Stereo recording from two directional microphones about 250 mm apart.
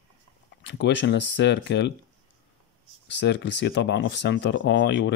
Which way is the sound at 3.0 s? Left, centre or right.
Left.